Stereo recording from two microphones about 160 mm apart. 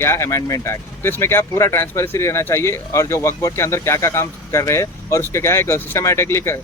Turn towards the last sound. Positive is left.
turn(degrees=15)  # may be behind; listen again after turning